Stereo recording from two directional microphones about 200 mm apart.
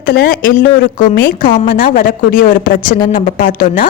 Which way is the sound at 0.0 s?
50° left (ahead or behind).